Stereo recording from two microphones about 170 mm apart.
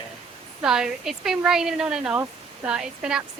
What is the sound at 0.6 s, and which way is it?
Speech, 5° right (ahead or behind).